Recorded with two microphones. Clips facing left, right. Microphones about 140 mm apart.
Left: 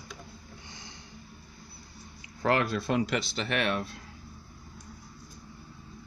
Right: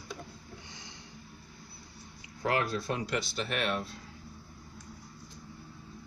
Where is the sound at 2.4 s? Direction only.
65° left (ahead or behind).